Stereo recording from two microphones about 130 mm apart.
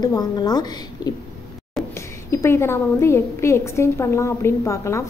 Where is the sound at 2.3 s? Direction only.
20° left (ahead or behind).